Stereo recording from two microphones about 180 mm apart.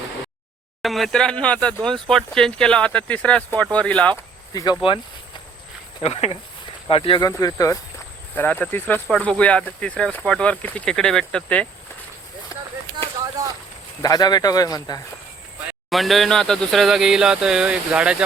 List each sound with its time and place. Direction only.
0.8 s speech: centre (ahead or behind)
4.5 s speech: 25° left (ahead or behind)
6.0 s speech: 35° left (ahead or behind); by 11.7 s 5° left (ahead or behind)
14.0 s speech: 20° left (ahead or behind)
15.9 s speech: centre (ahead or behind)